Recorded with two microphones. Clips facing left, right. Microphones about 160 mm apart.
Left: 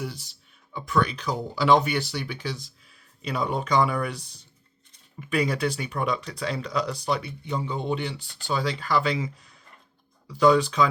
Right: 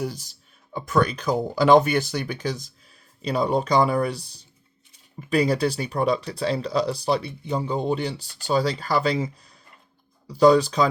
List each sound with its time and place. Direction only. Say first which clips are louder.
0.0 s speech: right 5 dB; 40° right (ahead or behind)